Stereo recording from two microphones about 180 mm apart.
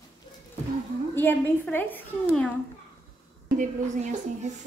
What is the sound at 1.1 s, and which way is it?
Speech, 10° left (ahead or behind).